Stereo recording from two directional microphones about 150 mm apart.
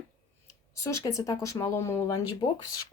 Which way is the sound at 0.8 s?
20° left (ahead or behind).